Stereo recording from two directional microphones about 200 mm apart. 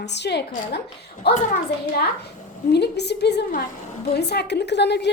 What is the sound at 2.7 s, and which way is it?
Speech, 55° left (ahead or behind).